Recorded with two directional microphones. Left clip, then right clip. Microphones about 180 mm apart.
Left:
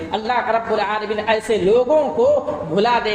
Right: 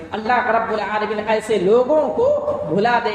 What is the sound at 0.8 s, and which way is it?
Speech, 15° left (ahead or behind).